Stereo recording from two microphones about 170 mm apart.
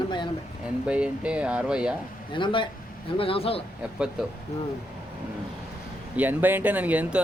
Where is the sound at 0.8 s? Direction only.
5° right (ahead or behind).